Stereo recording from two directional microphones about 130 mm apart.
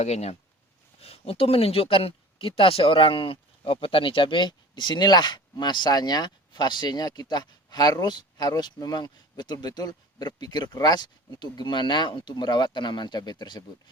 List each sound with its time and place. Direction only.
0.0 s speech: 55° left (ahead or behind); by 13.7 s 35° left (ahead or behind)